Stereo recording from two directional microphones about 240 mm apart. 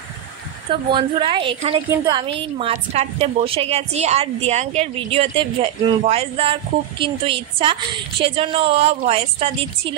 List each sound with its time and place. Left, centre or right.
0.7 s speech: right